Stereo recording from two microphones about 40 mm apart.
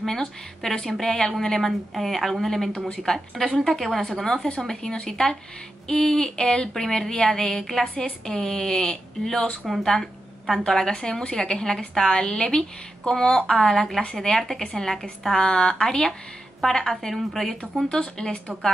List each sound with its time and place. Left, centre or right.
0.0 s a woman's voice: centre
10.6 s a woman's voice: centre
15.4 s a woman's voice: left; by 17.8 s centre
17.8 s a woman's voice: centre